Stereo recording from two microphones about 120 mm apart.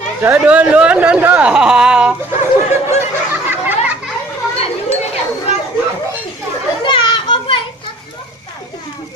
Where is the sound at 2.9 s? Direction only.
20° right (ahead or behind).